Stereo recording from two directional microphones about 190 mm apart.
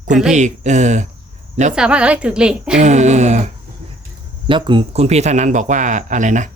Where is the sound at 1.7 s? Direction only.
5° right (ahead or behind).